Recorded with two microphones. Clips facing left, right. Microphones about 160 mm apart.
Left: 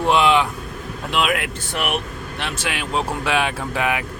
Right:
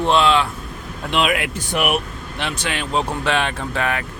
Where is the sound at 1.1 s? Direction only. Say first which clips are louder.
Right 2 dB; centre (ahead or behind).